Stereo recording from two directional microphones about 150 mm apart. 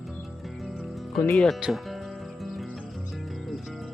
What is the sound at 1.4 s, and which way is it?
Music, centre (ahead or behind).